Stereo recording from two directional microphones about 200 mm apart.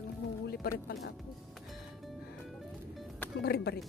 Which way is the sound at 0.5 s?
50° left (ahead or behind).